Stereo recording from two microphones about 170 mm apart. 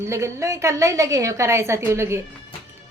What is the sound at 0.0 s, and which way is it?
A woman's voice, 15° right (ahead or behind).